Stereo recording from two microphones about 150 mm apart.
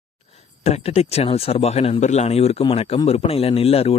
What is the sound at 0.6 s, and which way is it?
Speech, 45° left (ahead or behind).